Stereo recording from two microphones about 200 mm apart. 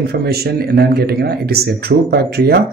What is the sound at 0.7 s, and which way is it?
Speech, 50° right (ahead or behind).